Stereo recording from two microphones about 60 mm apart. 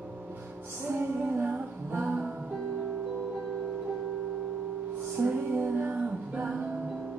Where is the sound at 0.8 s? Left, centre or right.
Right.